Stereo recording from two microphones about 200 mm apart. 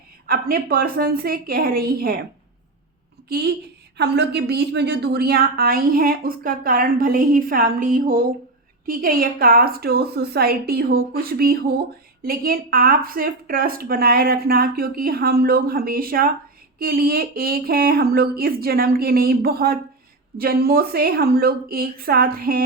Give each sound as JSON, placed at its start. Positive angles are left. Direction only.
{"t": 0.3, "sound": "a woman's voice", "side_deg": -50}
{"t": 3.2, "sound": "a woman's voice", "side_deg": -55}